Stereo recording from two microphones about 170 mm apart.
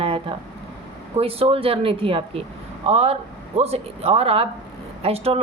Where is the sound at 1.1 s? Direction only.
35° right (ahead or behind).